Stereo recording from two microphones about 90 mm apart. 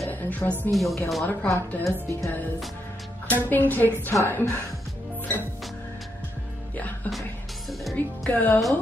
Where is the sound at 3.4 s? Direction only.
20° left (ahead or behind).